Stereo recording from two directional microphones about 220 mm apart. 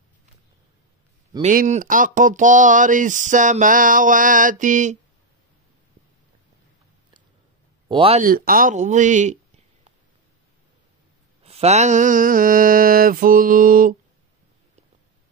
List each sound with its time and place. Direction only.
1.4 s speech: 35° right (ahead or behind)
7.9 s speech: 25° right (ahead or behind)
8.2 s speech: 40° right (ahead or behind)
11.4 s speech: 30° right (ahead or behind)